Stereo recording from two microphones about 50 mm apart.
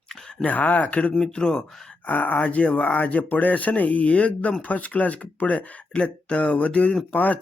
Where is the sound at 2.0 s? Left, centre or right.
Left.